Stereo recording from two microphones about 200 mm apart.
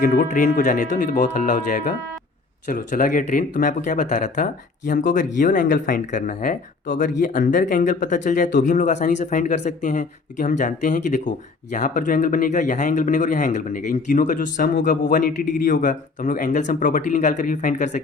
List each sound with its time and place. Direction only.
0.0 s speech: 40° left (ahead or behind)